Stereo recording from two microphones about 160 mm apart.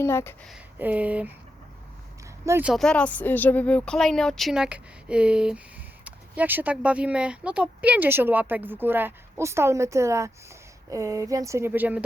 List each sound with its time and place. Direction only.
0.0 s speech: 15° left (ahead or behind)
0.8 s speech: 10° right (ahead or behind)
2.4 s speech: 15° right (ahead or behind)
2.6 s speech: 5° left (ahead or behind)